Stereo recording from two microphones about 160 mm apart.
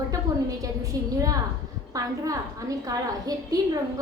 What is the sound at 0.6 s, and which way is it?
A woman's voice, 20° right (ahead or behind).